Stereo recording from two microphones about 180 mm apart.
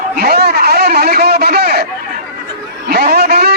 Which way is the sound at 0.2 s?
60° right (ahead or behind).